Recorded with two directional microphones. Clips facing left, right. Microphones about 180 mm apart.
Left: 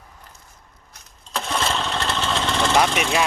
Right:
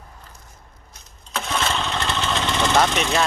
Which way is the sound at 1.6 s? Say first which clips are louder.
Even; centre (ahead or behind).